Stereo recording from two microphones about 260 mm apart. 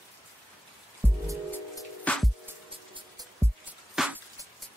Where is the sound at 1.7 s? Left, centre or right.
Centre.